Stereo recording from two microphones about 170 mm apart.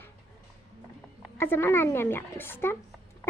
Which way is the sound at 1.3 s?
15° left (ahead or behind).